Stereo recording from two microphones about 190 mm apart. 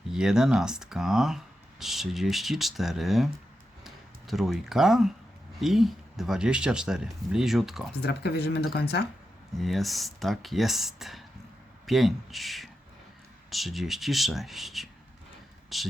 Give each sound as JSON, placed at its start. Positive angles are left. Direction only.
{"t": 0.1, "sound": "speech", "side_deg": -5}
{"t": 8.0, "sound": "speech", "side_deg": 60}
{"t": 9.6, "sound": "speech", "side_deg": 0}